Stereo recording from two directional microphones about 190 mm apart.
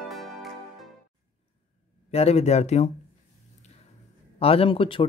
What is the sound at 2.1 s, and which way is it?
Speech, 35° left (ahead or behind).